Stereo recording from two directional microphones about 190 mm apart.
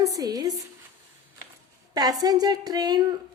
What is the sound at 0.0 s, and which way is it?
Speech, 20° right (ahead or behind).